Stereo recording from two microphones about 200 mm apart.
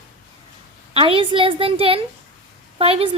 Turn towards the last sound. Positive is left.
turn(degrees=-30)  # may be behind; listen again after turning